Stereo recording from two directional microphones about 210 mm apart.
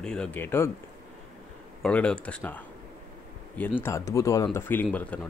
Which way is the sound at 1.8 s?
5° left (ahead or behind).